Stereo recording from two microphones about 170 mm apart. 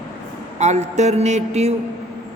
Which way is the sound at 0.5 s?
40° right (ahead or behind).